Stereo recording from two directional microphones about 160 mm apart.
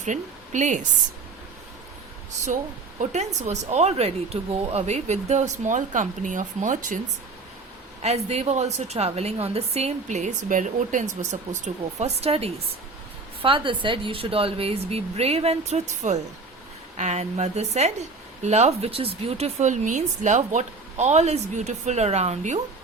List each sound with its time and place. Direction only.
0.0 s a woman's voice: 50° right (ahead or behind)
3.0 s a woman's voice: 45° right (ahead or behind)
8.0 s a woman's voice: 40° right (ahead or behind)